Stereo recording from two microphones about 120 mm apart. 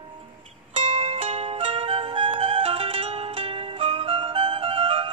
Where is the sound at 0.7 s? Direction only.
50° right (ahead or behind).